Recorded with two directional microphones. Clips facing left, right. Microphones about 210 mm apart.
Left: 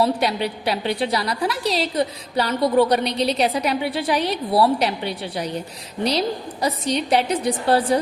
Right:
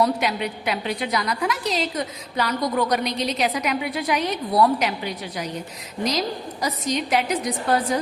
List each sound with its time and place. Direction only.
0.0 s a woman's voice: 30° left (ahead or behind)